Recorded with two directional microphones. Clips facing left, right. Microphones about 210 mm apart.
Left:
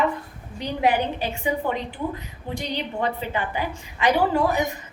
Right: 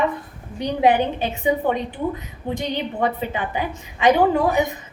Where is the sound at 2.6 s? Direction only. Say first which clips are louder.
Right 3 dB; 20° right (ahead or behind).